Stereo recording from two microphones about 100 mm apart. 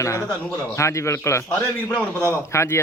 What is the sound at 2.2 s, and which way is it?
Speech, 25° left (ahead or behind).